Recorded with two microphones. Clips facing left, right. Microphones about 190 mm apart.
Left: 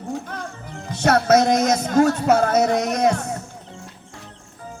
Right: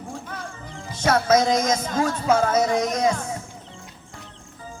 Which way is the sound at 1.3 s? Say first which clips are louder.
Left 3 dB; 65° left (ahead or behind).